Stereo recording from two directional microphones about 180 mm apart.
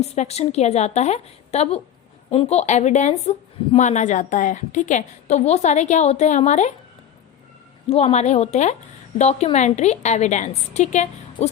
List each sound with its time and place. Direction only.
0.1 s speech: 35° left (ahead or behind)
7.9 s speech: 35° left (ahead or behind)